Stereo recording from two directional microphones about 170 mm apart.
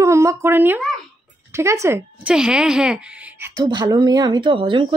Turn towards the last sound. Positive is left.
turn(degrees=-30)  # may be behind; listen again after turning